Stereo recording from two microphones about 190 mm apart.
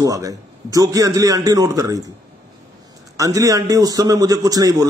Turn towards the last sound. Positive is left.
turn(degrees=-20)  # may be behind; listen again after turning